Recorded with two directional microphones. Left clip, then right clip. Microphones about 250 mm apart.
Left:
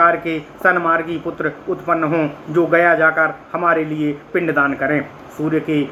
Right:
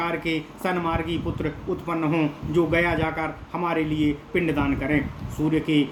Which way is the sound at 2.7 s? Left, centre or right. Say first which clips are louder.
Left 10 dB; right.